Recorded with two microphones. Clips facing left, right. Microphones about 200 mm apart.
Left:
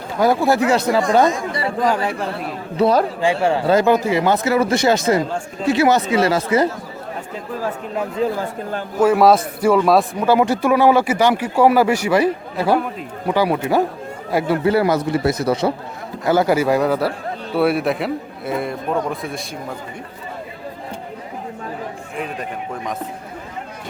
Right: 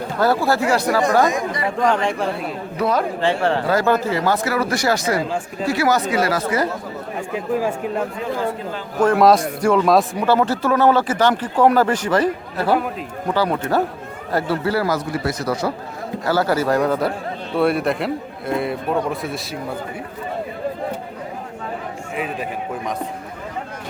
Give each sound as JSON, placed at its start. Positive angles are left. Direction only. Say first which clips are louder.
{"t": 0.2, "sound": "speech", "louder": "left 3 dB", "side_deg": 15}
{"t": 1.8, "sound": "a man's voice", "louder": "right 1 dB", "side_deg": 5}
{"t": 2.7, "sound": "a man's voice", "louder": "left 5 dB", "side_deg": 30}
{"t": 3.2, "sound": "speech", "louder": "left 1 dB", "side_deg": 10}
{"t": 8.2, "sound": "a man's voice", "louder": "left 5 dB", "side_deg": 35}
{"t": 9.0, "sound": "a man's voice", "louder": "left 1 dB", "side_deg": 5}
{"t": 10.2, "sound": "a man's voice", "louder": "left 2 dB", "side_deg": 15}
{"t": 22.1, "sound": "a man's voice", "louder": "right 2 dB", "side_deg": -5}